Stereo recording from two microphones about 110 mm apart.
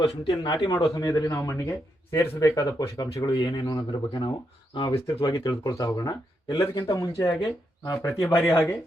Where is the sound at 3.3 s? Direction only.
45° left (ahead or behind).